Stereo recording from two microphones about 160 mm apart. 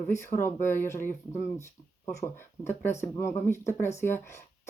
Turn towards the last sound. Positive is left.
turn(degrees=15)  # may be behind; listen again after turning